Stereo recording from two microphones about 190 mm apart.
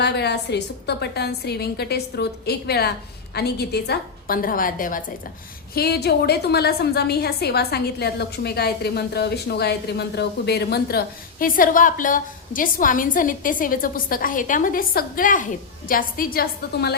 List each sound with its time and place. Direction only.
0.0 s a woman's voice: 60° left (ahead or behind)
5.7 s a woman's voice: 55° left (ahead or behind)